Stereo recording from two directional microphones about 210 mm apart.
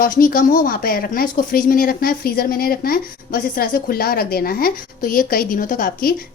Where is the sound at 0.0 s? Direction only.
40° left (ahead or behind).